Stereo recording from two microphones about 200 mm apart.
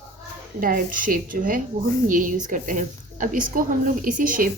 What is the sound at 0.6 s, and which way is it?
A woman's voice, 45° right (ahead or behind).